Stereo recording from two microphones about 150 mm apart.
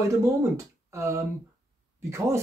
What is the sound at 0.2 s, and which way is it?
Speech, 20° right (ahead or behind).